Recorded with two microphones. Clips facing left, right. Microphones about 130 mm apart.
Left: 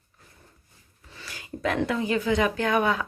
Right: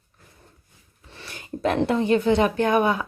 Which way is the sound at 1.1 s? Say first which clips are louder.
Right 2 dB; 25° right (ahead or behind).